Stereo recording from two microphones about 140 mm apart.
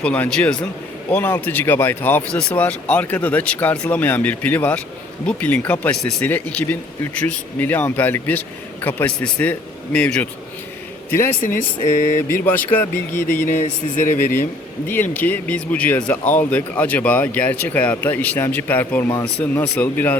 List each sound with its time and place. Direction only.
0.0 s speech: 10° left (ahead or behind)
12.5 s speech: 15° left (ahead or behind)
13.6 s speech: 70° left (ahead or behind)
14.8 s speech: 15° left (ahead or behind)